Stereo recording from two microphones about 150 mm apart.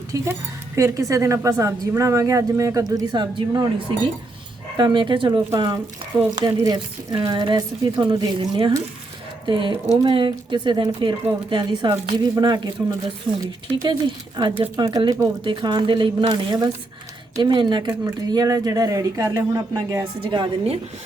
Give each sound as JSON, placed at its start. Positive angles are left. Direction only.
{"t": 0.1, "sound": "a woman's voice", "side_deg": -20}
{"t": 4.8, "sound": "a woman's voice", "side_deg": -30}
{"t": 20.2, "sound": "a woman's voice", "side_deg": -35}